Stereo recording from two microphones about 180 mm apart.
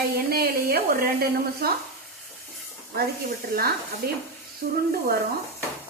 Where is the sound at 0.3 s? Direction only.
60° right (ahead or behind).